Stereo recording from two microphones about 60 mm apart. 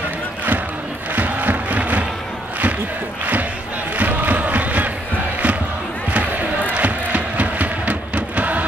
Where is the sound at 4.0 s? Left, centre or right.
Right.